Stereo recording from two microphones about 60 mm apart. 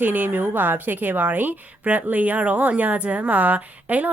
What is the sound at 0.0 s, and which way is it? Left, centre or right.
A woman's voice, right.